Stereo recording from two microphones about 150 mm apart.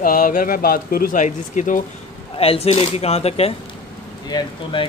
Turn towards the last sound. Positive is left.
turn(degrees=30)  # may be behind; listen again after turning